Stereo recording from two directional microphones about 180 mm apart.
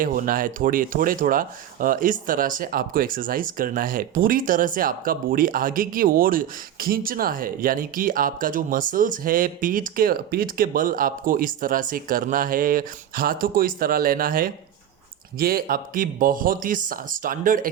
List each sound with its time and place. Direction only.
0.0 s speech: 50° right (ahead or behind)